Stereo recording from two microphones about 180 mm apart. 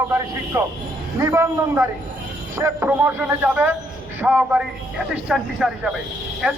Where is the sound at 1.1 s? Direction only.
15° right (ahead or behind).